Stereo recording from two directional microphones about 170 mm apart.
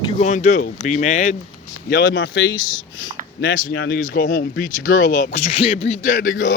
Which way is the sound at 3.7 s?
90° left.